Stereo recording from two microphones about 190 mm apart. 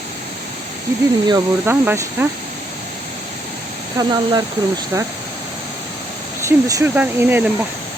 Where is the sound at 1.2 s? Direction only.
20° right (ahead or behind).